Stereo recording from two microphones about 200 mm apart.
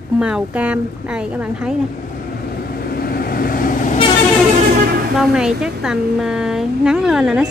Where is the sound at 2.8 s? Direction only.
50° left (ahead or behind).